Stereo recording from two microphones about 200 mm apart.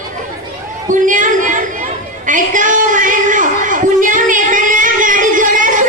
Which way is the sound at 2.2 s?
40° right (ahead or behind).